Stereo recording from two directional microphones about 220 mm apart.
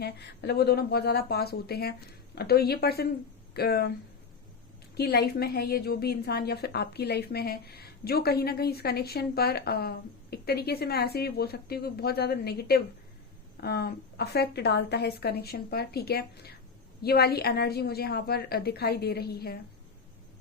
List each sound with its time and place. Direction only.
0.0 s a woman's voice: 45° left (ahead or behind)
4.9 s a woman's voice: 45° left (ahead or behind)